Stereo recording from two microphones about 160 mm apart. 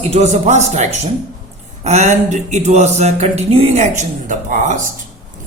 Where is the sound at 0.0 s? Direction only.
40° right (ahead or behind).